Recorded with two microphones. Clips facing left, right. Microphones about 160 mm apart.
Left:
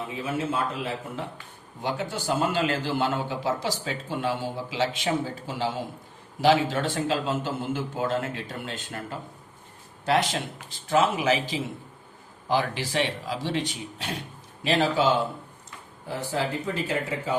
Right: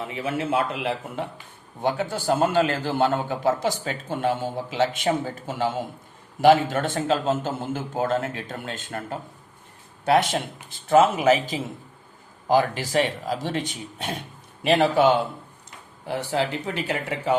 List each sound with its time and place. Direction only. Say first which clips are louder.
0.1 s speech: right 4 dB; 70° right (ahead or behind)
1.8 s a man's voice: right 5 dB; 55° right (ahead or behind)
10.8 s a man's voice: right 5 dB; 50° right (ahead or behind)
16.0 s speech: right 3 dB; 70° right (ahead or behind)